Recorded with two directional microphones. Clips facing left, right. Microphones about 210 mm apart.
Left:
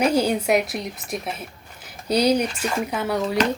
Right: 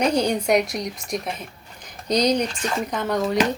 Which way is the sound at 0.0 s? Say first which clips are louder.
Left 1 dB; 5° left (ahead or behind).